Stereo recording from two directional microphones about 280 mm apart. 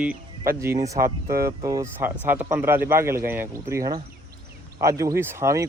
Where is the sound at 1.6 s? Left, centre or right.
Centre.